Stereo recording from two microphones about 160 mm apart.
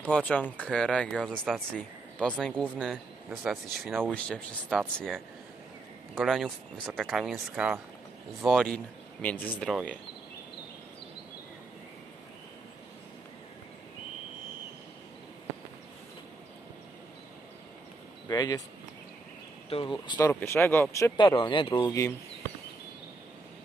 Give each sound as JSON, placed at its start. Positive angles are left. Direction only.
{"t": 0.0, "sound": "speech", "side_deg": 10}
{"t": 18.3, "sound": "speech", "side_deg": 25}
{"t": 19.7, "sound": "speech", "side_deg": 30}
{"t": 20.2, "sound": "speech", "side_deg": 15}
{"t": 21.2, "sound": "speech", "side_deg": 30}